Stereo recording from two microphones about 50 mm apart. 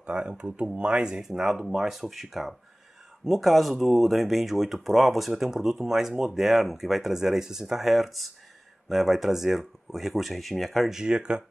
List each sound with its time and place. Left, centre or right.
0.0 s speech: centre
10.9 s speech: centre